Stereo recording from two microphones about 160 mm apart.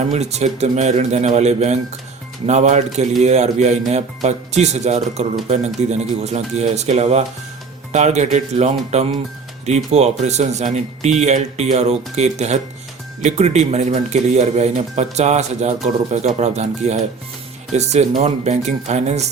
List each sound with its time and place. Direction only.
0.1 s speech: 45° right (ahead or behind)